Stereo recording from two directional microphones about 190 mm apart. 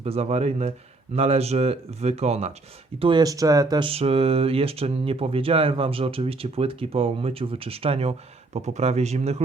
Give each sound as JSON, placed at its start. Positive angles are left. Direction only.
{"t": 0.0, "sound": "speech", "side_deg": -30}